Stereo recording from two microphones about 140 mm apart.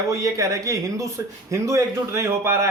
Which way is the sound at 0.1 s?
20° right (ahead or behind).